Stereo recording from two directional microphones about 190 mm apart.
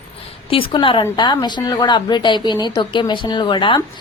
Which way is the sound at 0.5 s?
30° left (ahead or behind).